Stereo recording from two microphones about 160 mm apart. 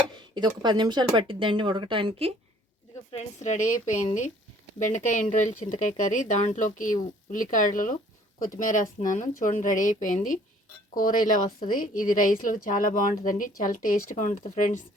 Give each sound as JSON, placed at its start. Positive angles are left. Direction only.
{"t": 0.2, "sound": "speech", "side_deg": -30}
{"t": 3.1, "sound": "a woman's voice", "side_deg": 45}